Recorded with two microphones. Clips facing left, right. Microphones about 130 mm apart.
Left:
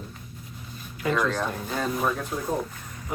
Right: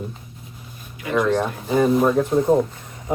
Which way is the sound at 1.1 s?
20° right (ahead or behind).